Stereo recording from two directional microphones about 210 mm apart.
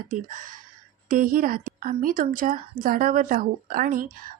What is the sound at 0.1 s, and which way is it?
A woman's voice, 40° right (ahead or behind).